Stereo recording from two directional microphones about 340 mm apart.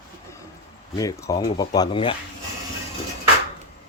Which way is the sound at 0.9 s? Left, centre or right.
Centre.